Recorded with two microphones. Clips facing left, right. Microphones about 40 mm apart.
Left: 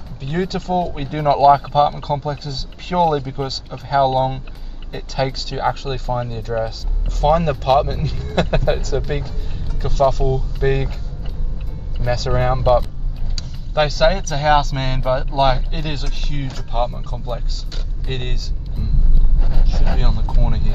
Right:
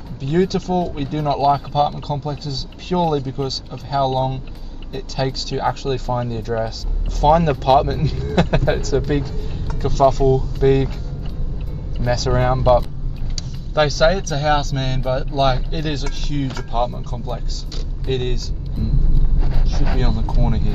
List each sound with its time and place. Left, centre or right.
0.2 s speech: centre
12.3 s speech: centre
13.8 s speech: centre
18.0 s speech: centre
19.6 s speech: centre